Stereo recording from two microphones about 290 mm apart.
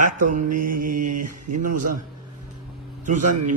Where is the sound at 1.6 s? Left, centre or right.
Right.